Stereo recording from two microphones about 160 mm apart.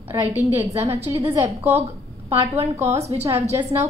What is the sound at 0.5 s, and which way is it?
A woman's voice, 15° right (ahead or behind).